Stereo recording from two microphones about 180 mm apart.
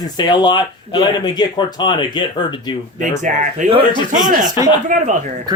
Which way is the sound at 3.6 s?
45° right (ahead or behind).